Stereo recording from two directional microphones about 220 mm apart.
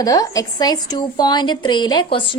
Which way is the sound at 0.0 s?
15° left (ahead or behind).